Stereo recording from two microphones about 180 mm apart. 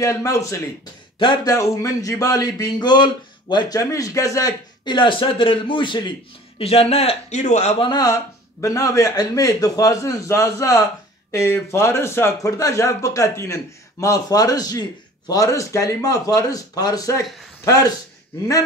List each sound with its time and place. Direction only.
0.0 s a man's voice: 20° left (ahead or behind); by 7.9 s 40° left (ahead or behind)
7.9 s speech: 20° left (ahead or behind)